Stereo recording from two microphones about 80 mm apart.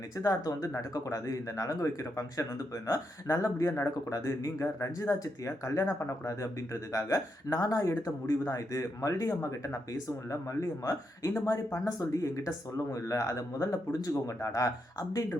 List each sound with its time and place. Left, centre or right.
0.2 s speech: left